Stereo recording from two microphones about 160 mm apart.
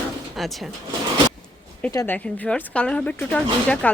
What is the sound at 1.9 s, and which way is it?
Speech, 20° left (ahead or behind).